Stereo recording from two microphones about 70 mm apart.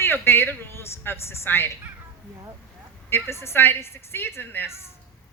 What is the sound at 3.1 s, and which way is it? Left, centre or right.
A woman's voice, left.